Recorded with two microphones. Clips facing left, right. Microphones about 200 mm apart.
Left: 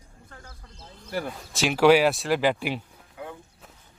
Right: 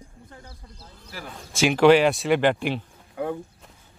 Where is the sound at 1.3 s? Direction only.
5° left (ahead or behind).